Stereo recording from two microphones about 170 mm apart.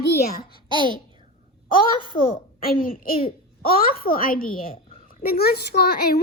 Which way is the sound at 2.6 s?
60° left (ahead or behind).